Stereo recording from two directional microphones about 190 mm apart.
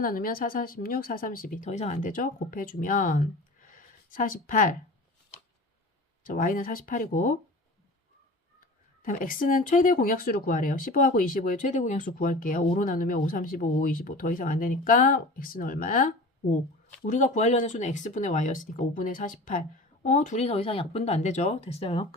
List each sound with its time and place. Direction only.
0.0 s speech: 50° left (ahead or behind)
6.2 s speech: 45° left (ahead or behind)
9.0 s speech: 45° left (ahead or behind)